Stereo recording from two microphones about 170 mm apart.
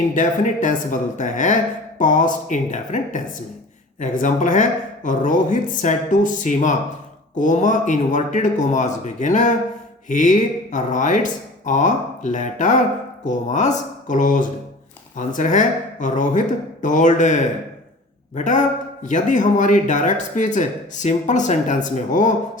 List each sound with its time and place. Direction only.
0.1 s speech: 50° left (ahead or behind)